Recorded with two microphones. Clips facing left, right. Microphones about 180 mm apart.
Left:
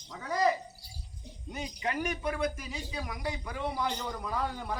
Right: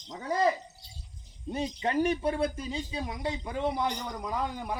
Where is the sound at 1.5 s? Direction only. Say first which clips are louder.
Right 5 dB; 30° right (ahead or behind).